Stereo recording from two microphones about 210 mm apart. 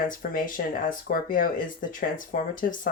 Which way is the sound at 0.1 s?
40° left (ahead or behind).